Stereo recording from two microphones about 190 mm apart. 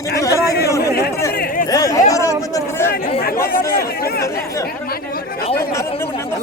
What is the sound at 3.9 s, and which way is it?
Chatter, 55° left (ahead or behind).